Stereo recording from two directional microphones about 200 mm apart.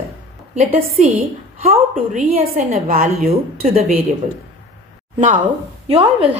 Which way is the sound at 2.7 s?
35° right (ahead or behind).